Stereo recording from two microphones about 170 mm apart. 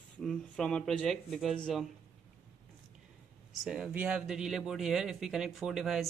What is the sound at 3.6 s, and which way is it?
Speech, 5° right (ahead or behind).